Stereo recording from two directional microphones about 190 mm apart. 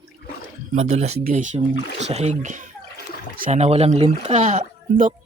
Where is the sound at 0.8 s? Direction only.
35° right (ahead or behind).